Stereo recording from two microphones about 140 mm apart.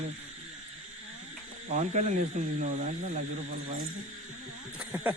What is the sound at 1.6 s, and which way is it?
Speech, 55° right (ahead or behind).